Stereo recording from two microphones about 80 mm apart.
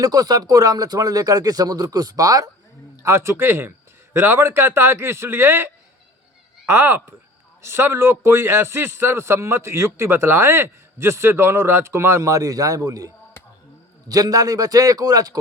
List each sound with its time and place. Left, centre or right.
0.0 s speech: right
3.0 s a man's voice: right
13.4 s a sound: left
14.1 s speech: right